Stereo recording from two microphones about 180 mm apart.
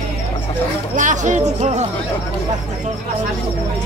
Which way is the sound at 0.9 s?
45° right (ahead or behind).